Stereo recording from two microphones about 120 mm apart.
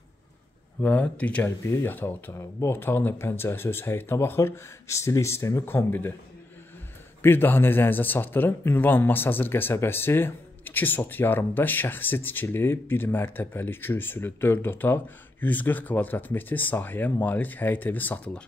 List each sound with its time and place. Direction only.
0.7 s speech: 15° left (ahead or behind)
7.2 s speech: 20° left (ahead or behind)